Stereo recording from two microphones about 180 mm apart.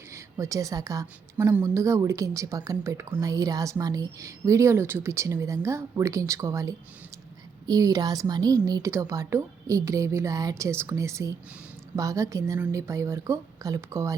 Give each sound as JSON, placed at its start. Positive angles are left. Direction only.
{"t": 0.1, "sound": "a woman's voice", "side_deg": -20}